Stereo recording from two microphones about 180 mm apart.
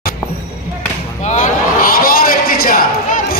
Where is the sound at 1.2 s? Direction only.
45° left (ahead or behind).